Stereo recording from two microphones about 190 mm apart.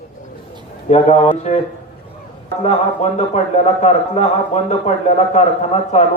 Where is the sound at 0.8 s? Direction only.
35° left (ahead or behind).